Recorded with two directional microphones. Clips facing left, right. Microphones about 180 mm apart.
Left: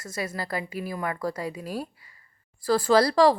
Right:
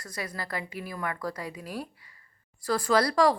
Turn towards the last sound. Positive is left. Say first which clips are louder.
# left 4 dB
turn(degrees=30)  # may be behind; listen again after turning